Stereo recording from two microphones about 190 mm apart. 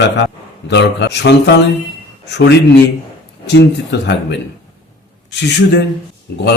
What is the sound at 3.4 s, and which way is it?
Speech, 65° left (ahead or behind).